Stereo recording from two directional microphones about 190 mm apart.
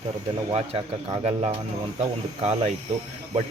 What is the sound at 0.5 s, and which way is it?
Speech, 35° right (ahead or behind).